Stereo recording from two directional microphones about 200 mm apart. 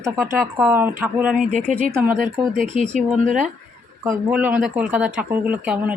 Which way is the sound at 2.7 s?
35° right (ahead or behind).